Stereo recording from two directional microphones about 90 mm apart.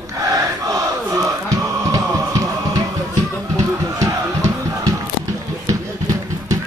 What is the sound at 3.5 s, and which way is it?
Music, 35° right (ahead or behind).